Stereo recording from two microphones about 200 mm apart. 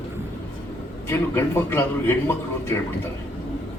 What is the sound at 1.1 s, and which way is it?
A man's voice, 10° left (ahead or behind).